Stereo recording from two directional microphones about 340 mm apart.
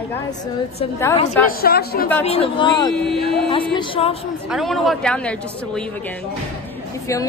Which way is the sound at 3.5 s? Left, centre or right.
Centre.